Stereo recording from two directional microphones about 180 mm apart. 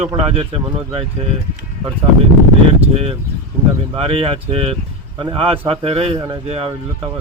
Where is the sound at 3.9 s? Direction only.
30° right (ahead or behind).